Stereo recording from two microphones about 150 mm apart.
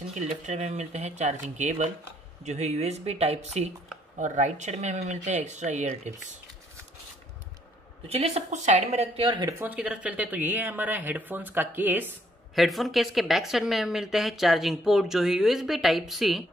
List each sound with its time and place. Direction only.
0.5 s speech: 50° right (ahead or behind)
8.1 s speech: 45° right (ahead or behind)
9.5 s speech: 10° right (ahead or behind)
12.5 s speech: centre (ahead or behind)